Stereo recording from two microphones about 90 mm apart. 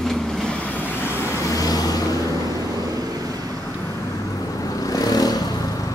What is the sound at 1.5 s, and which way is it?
Vehicle, 45° left (ahead or behind).